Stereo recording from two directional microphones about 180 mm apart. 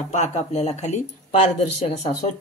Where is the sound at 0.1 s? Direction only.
40° left (ahead or behind).